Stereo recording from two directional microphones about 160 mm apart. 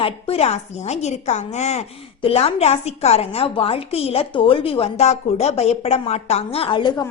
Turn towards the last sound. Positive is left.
turn(degrees=30)  # may be behind; listen again after turning